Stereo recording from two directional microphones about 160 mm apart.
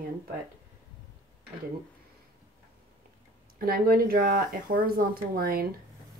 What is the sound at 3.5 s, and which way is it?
Speech, 65° right (ahead or behind).